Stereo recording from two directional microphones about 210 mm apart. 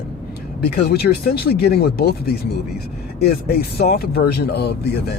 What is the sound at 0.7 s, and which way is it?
Speech, 50° left (ahead or behind).